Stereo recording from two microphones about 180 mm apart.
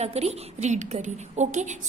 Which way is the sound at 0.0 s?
35° right (ahead or behind).